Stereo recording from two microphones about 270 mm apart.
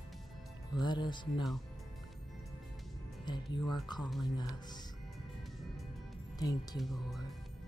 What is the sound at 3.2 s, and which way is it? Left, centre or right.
Music, centre.